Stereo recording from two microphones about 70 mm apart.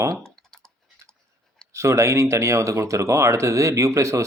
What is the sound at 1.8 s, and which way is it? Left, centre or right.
Speech, right.